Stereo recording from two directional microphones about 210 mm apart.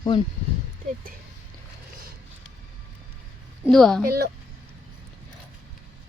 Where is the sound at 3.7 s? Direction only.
Centre (ahead or behind).